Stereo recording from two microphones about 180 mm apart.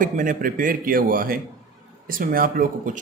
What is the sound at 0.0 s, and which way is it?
Speech, 45° right (ahead or behind).